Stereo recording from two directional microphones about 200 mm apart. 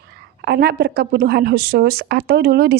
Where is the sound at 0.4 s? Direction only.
55° right (ahead or behind).